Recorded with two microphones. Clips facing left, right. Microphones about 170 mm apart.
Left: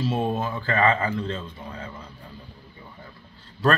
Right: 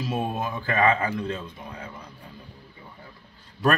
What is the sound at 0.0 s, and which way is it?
Speech, 10° right (ahead or behind).